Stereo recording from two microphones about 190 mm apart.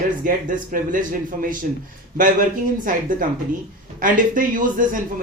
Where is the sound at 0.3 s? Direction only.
45° right (ahead or behind).